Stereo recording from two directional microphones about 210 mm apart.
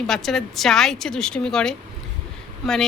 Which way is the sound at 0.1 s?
Centre (ahead or behind).